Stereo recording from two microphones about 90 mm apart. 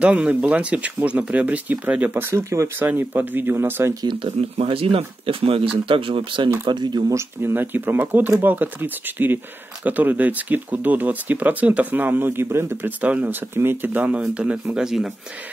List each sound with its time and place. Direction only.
0.0 s speech: 15° right (ahead or behind)
2.2 s speech: 30° right (ahead or behind)
4.1 s speech: 75° right (ahead or behind)
5.9 s speech: 75° right (ahead or behind)
6.7 s speech: 55° right (ahead or behind)
7.2 s speech: 25° right (ahead or behind); by 15.1 s 5° right (ahead or behind)